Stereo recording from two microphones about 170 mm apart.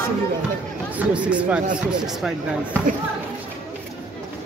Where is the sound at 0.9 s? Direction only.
5° right (ahead or behind).